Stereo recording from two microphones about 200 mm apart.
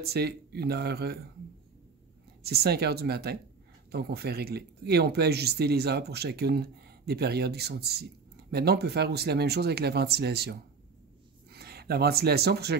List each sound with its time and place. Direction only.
0.0 s speech: 50° right (ahead or behind)
2.4 s speech: 50° right (ahead or behind)